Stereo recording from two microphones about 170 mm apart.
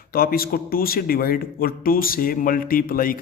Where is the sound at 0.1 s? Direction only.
60° left (ahead or behind).